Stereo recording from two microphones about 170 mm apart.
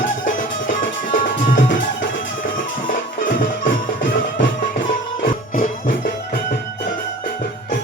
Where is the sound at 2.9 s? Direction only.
55° left (ahead or behind).